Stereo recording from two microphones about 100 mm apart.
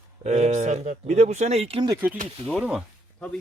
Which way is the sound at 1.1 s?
90° right.